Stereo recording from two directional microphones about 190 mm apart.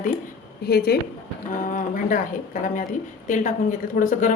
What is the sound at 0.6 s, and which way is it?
Speech, 55° left (ahead or behind).